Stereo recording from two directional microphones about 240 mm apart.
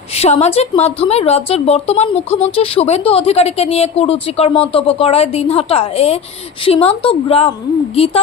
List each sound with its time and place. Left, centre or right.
0.2 s speech: left